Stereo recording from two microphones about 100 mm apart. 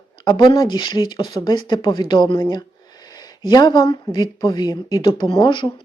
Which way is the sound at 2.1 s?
60° left (ahead or behind).